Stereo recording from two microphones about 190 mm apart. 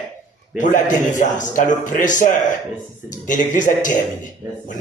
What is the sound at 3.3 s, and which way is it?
Speech, 40° left (ahead or behind).